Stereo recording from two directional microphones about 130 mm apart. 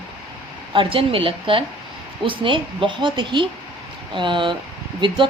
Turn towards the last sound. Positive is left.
turn(degrees=-40)  # may be behind; listen again after turning